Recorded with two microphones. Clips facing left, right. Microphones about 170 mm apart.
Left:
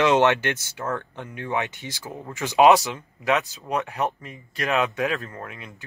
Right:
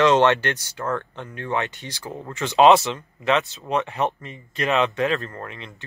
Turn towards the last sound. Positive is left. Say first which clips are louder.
# right 2 dB
turn(degrees=5)  # may be behind; listen again after turning